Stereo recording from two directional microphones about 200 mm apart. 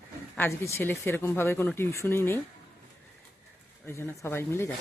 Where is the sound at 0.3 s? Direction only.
10° left (ahead or behind).